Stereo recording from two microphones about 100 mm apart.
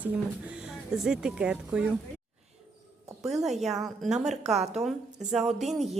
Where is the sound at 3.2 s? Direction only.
90° right.